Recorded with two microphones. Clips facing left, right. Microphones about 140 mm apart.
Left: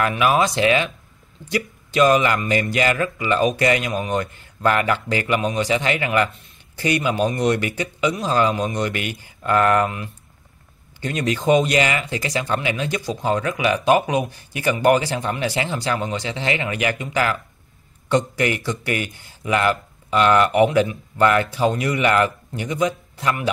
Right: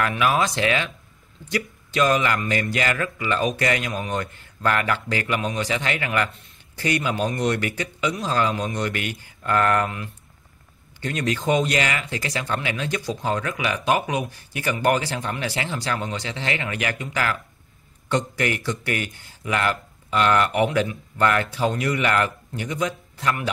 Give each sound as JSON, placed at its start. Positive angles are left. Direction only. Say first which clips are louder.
{"t": 0.0, "sound": "speech", "louder": "left 3 dB", "side_deg": 20}